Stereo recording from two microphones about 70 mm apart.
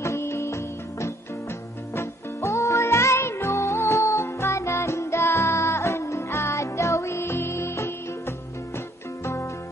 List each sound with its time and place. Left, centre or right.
0.0 s music: left